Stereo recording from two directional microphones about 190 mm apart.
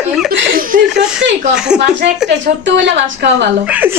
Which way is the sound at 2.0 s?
70° right (ahead or behind).